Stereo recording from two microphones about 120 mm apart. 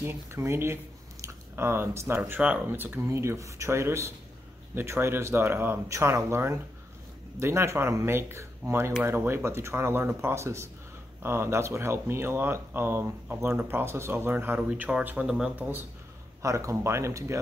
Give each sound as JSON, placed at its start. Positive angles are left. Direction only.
{"t": 0.0, "sound": "speech", "side_deg": -20}
{"t": 16.4, "sound": "speech", "side_deg": -25}